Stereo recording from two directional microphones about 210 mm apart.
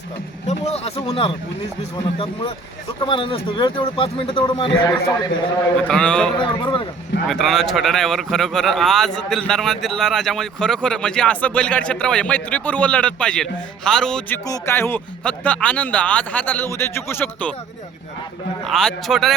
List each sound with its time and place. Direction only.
0.4 s a man's voice: 30° left (ahead or behind)
5.9 s speech: 5° left (ahead or behind)
6.4 s a man's voice: 25° left (ahead or behind)
7.3 s speech: centre (ahead or behind)
14.4 s speech: 15° left (ahead or behind)
18.6 s speech: centre (ahead or behind)